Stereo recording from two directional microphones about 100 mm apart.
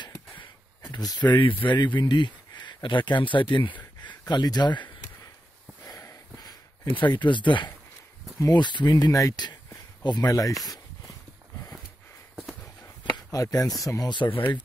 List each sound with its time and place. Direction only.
0.9 s speech: 45° left (ahead or behind)
5.9 s a sound: 35° left (ahead or behind); by 7.7 s 50° left (ahead or behind)
8.4 s speech: 45° left (ahead or behind)
12.8 s chopping: 35° left (ahead or behind)
13.8 s speech: 35° left (ahead or behind)
14.1 s speech: 55° left (ahead or behind)